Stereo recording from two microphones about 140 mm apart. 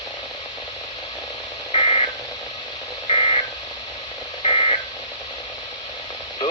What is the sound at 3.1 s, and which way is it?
Frog, 45° left (ahead or behind).